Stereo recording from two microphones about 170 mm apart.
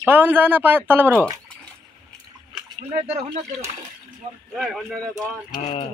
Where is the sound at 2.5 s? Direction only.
35° right (ahead or behind).